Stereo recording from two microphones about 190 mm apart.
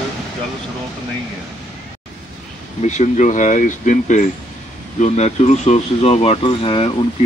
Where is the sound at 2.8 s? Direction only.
40° left (ahead or behind).